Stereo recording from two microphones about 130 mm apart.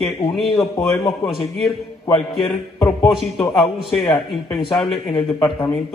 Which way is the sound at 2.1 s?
40° left (ahead or behind).